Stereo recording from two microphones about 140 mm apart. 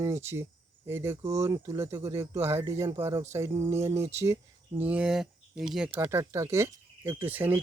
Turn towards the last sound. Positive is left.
turn(degrees=-15)  # may be behind; listen again after turning